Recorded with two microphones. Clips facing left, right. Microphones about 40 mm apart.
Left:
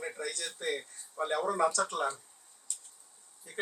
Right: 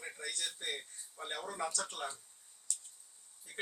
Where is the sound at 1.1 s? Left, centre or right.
Left.